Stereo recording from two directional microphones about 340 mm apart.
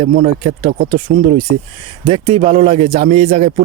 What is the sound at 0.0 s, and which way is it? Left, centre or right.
Speech, right.